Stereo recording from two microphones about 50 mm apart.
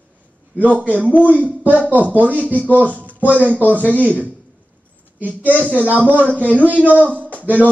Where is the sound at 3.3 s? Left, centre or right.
Right.